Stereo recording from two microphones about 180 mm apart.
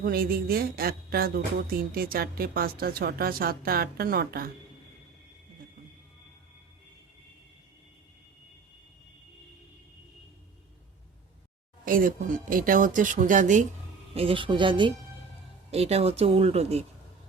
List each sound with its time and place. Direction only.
0.0 s speech: 55° right (ahead or behind)
11.9 s speech: 50° right (ahead or behind)
14.1 s speech: 30° right (ahead or behind)